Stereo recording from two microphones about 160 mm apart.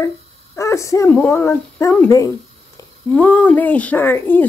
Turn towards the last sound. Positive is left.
turn(degrees=10)  # may be behind; listen again after turning